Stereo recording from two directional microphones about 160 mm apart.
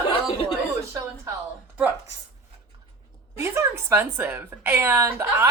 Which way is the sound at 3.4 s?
15° right (ahead or behind).